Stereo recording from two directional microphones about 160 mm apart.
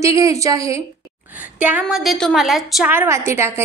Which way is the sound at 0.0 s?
20° right (ahead or behind).